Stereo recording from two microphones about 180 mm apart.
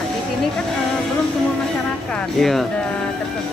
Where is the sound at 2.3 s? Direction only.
Centre (ahead or behind).